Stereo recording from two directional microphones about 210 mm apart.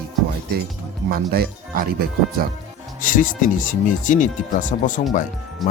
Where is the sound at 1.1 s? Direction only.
45° right (ahead or behind).